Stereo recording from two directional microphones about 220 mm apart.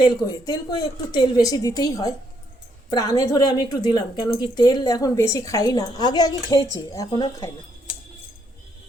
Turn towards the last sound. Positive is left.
turn(degrees=15)  # may be behind; listen again after turning